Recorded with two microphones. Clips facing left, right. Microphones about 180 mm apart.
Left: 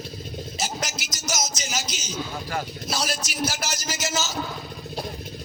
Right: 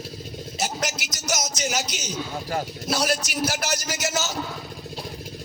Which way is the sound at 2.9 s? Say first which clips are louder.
Right 8 dB; 65° right (ahead or behind).